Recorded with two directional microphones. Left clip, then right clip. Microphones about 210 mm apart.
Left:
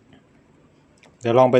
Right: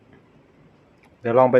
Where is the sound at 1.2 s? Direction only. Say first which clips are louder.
Even; 20° left (ahead or behind).